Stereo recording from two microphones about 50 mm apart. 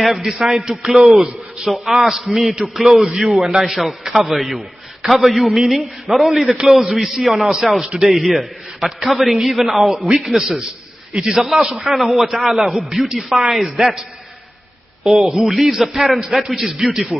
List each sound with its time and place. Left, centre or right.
0.0 s a man's voice: centre
2.5 s a man's voice: centre
2.8 s a man's voice: centre
15.0 s a man's voice: centre
17.1 s speech: right